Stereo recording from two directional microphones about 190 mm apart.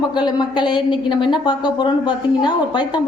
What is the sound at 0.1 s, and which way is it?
Speech, 20° left (ahead or behind).